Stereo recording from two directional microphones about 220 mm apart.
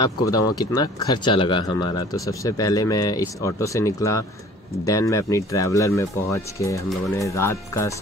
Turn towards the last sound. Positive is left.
turn(degrees=10)  # may be behind; listen again after turning